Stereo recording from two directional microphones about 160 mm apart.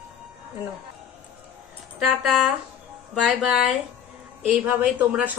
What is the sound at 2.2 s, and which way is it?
Speech, centre (ahead or behind).